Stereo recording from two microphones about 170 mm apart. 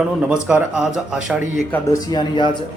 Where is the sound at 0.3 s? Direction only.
5° right (ahead or behind).